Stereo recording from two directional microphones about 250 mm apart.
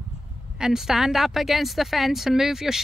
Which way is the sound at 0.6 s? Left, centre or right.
Centre.